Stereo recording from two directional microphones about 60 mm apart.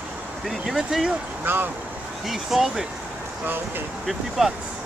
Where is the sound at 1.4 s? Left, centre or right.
Right.